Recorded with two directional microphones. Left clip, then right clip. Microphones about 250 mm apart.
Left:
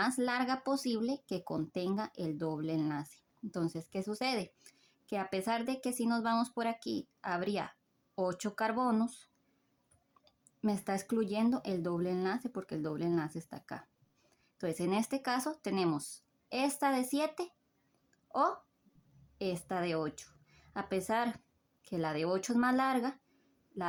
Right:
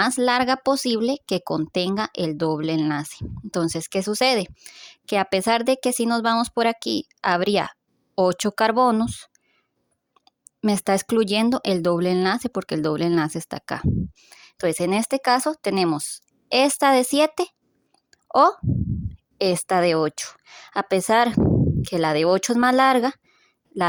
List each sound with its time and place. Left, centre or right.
0.0 s speech: right
18.1 s a sound: right
19.4 s speech: right